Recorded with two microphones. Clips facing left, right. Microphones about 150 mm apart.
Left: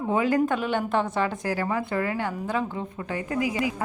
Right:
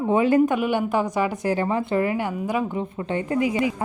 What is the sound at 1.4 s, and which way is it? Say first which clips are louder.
A woman's voice: right 4 dB; 25° right (ahead or behind).